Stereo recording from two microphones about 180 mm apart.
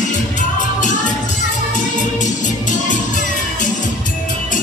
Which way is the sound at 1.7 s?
45° left (ahead or behind).